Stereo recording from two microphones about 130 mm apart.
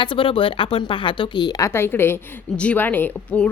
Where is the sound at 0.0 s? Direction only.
40° left (ahead or behind).